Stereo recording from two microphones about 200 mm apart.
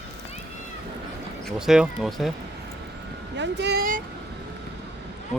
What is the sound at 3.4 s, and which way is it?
Speech, 60° right (ahead or behind).